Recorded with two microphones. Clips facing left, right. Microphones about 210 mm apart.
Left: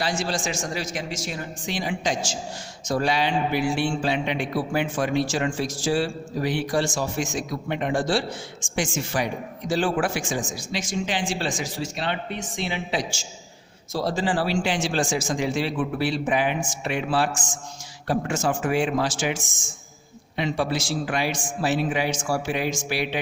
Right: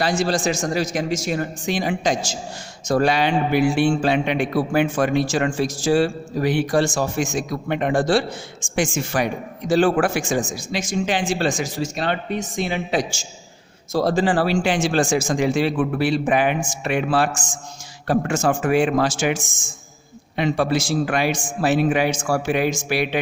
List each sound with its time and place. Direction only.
0.0 s a man's voice: 40° right (ahead or behind); by 23.2 s 55° right (ahead or behind)